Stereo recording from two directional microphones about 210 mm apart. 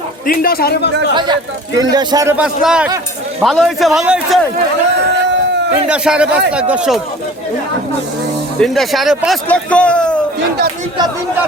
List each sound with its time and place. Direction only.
0.3 s a man's voice: 45° left (ahead or behind)
1.1 s a man's voice: 20° right (ahead or behind); by 4.4 s centre (ahead or behind)
5.9 s a man's voice: 5° right (ahead or behind)
8.6 s a man's voice: centre (ahead or behind)